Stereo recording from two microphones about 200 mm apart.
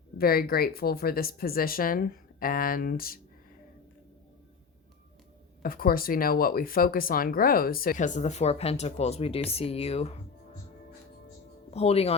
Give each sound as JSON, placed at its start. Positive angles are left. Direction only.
{"t": 0.2, "sound": "speech", "side_deg": 50}
{"t": 5.6, "sound": "speech", "side_deg": 45}
{"t": 11.7, "sound": "speech", "side_deg": 30}